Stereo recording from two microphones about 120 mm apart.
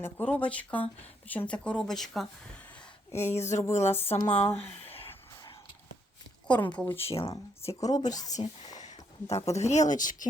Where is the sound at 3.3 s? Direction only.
75° left (ahead or behind).